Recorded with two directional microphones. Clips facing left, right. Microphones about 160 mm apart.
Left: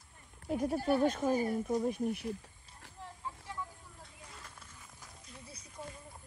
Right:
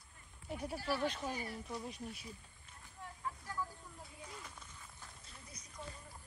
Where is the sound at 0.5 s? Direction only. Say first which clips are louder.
Left 9 dB; 50° left (ahead or behind).